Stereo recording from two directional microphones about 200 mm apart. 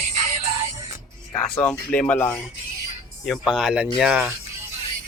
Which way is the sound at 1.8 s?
5° left (ahead or behind).